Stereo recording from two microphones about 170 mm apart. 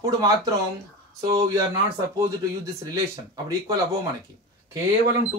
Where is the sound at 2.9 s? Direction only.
20° right (ahead or behind).